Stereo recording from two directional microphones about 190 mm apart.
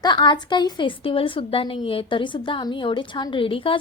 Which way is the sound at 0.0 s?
25° left (ahead or behind).